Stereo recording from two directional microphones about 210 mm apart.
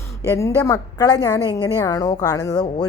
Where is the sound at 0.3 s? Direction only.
15° left (ahead or behind).